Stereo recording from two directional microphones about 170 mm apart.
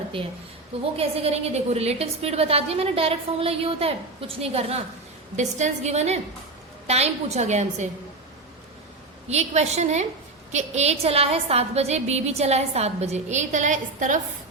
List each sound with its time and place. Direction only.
0.9 s a woman's voice: 35° right (ahead or behind)
9.3 s a woman's voice: 40° right (ahead or behind)